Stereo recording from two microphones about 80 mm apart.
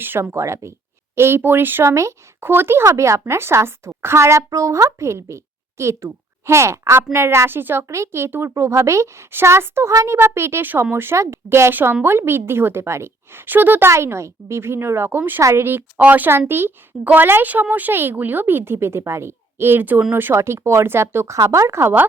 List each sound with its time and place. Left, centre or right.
0.0 s speech: right
9.9 s a child's voice: right
10.2 s speech: right
15.4 s speech: right
15.6 s a woman's voice: right